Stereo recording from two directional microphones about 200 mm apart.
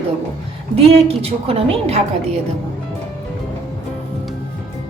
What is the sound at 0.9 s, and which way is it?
A woman's voice, 30° right (ahead or behind).